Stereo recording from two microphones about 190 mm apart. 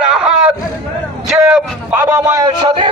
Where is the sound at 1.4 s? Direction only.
10° right (ahead or behind).